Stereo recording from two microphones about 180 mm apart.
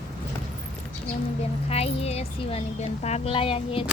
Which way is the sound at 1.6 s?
35° left (ahead or behind).